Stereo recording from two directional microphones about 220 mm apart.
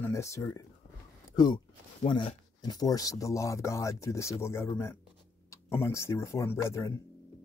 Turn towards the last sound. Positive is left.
turn(degrees=15)  # may be behind; listen again after turning